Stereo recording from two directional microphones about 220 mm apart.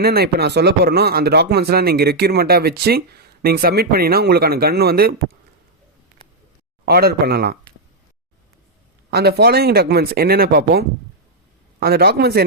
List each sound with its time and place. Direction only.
0.0 s speech: 45° right (ahead or behind)
6.8 s speech: 45° right (ahead or behind)
9.0 s speech: 45° right (ahead or behind)